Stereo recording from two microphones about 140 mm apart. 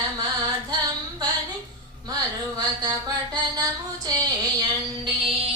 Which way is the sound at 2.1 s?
30° right (ahead or behind).